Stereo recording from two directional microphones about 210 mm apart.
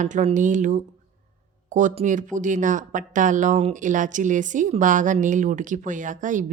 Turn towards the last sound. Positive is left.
turn(degrees=-35)  # may be behind; listen again after turning